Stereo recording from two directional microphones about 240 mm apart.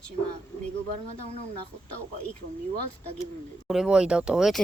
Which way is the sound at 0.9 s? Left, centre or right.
Right.